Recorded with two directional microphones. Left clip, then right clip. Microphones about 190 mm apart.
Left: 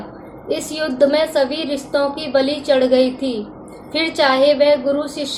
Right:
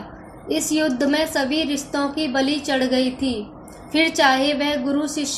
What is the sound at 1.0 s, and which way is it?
A woman's voice, 30° right (ahead or behind).